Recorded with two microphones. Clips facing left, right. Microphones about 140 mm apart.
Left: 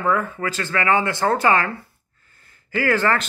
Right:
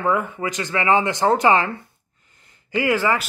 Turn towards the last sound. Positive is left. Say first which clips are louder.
# even
turn(degrees=-10)  # may be behind; listen again after turning